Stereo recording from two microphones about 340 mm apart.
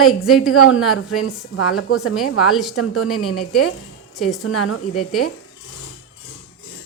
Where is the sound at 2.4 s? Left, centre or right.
Centre.